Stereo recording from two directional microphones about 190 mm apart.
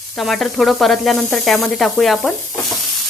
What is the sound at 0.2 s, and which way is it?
Speech, centre (ahead or behind).